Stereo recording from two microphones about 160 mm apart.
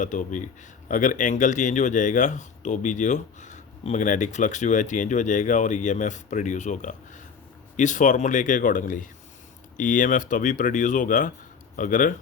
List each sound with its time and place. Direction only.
0.0 s speech: 50° left (ahead or behind)